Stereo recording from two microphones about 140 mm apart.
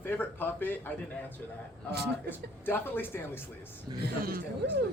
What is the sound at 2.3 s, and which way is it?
Speech, 15° left (ahead or behind).